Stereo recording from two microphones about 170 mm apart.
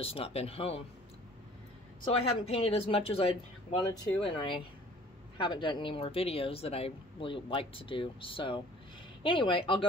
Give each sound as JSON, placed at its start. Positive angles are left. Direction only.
{"t": 0.0, "sound": "speech", "side_deg": 35}
{"t": 2.0, "sound": "speech", "side_deg": 35}